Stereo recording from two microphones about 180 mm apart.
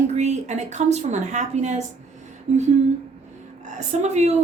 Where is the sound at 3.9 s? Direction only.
40° right (ahead or behind).